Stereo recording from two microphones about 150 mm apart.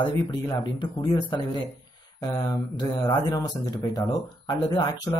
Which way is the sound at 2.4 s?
30° left (ahead or behind).